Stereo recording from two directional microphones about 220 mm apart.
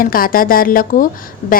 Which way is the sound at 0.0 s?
40° left (ahead or behind).